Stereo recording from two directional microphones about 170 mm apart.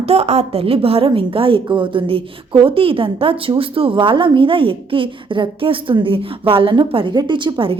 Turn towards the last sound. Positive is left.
turn(degrees=-30)  # may be behind; listen again after turning